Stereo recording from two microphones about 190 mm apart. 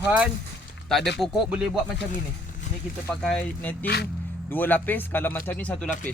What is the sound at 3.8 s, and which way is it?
Speech, 60° left (ahead or behind).